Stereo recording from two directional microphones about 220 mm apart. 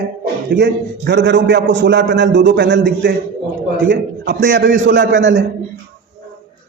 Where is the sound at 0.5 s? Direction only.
50° right (ahead or behind).